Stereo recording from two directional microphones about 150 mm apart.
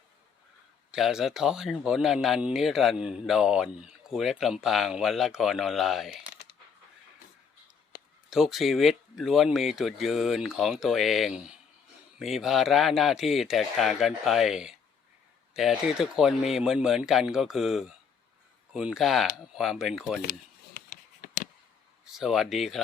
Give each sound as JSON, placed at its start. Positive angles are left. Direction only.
{"t": 0.9, "sound": "speech", "side_deg": -5}
{"t": 8.3, "sound": "speech", "side_deg": 0}
{"t": 20.8, "sound": "a sound", "side_deg": 90}
{"t": 22.0, "sound": "speech", "side_deg": 0}